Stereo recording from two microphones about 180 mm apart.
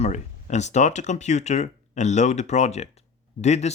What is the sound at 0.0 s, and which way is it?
Speech, 40° left (ahead or behind).